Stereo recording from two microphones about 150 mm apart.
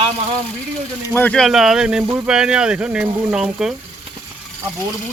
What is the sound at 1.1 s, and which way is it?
Speech, 10° left (ahead or behind).